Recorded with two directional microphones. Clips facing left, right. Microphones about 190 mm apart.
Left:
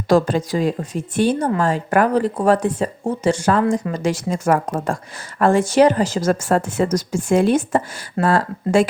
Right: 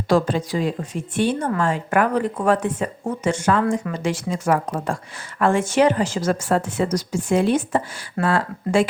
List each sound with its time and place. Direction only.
0.1 s a woman's voice: 45° left (ahead or behind)